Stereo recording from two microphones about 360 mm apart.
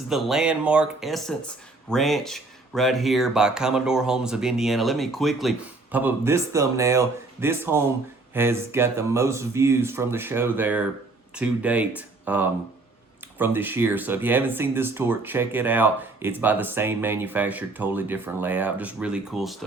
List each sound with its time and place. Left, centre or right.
0.1 s speech: centre